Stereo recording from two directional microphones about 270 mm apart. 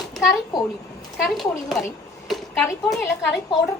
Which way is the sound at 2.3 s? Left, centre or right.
Centre.